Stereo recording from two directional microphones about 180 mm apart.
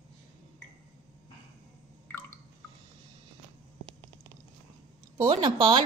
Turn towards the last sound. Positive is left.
turn(degrees=-25)  # may be behind; listen again after turning